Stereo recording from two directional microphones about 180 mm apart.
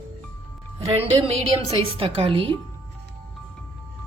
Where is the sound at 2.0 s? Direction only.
30° right (ahead or behind).